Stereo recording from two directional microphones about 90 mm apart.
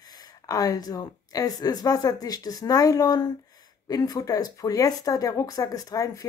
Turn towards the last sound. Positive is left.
turn(degrees=40)  # may be behind; listen again after turning